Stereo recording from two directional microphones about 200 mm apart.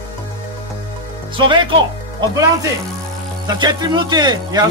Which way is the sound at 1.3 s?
25° right (ahead or behind).